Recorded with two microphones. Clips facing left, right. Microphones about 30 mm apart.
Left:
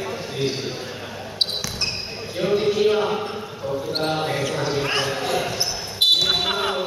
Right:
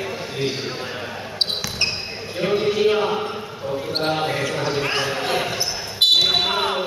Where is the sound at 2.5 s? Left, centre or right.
Centre.